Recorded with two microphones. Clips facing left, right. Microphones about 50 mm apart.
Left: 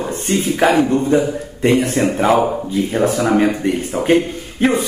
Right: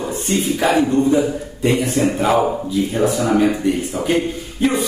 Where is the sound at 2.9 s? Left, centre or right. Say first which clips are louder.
Left 2 dB; left.